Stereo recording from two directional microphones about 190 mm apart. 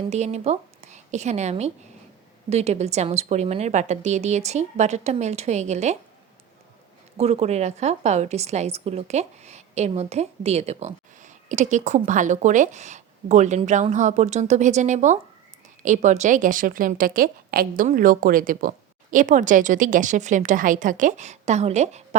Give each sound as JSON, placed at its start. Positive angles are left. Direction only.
{"t": 0.1, "sound": "a woman's voice", "side_deg": -35}
{"t": 7.2, "sound": "a woman's voice", "side_deg": -35}